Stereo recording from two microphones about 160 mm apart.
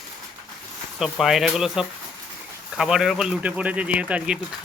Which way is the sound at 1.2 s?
Centre (ahead or behind).